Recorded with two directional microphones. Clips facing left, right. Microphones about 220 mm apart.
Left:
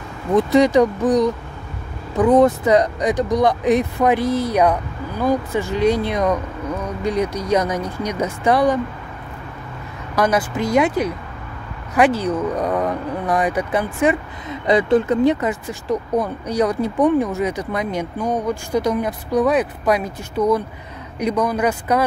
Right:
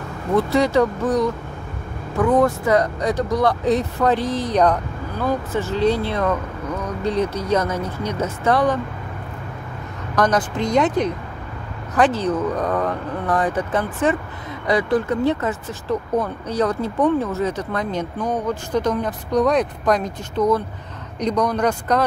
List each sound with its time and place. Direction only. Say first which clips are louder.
0.4 s speech: left 4 dB; 20° left (ahead or behind)
10.1 s speech: left 1 dB; 10° left (ahead or behind)
14.7 s speech: left 3 dB; 25° left (ahead or behind)